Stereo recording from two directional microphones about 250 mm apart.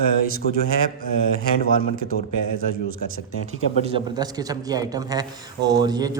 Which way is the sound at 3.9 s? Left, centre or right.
Centre.